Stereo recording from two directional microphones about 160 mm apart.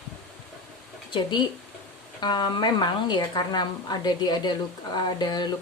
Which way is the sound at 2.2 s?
25° left (ahead or behind).